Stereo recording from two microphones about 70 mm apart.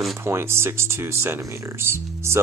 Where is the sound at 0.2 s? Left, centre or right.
Right.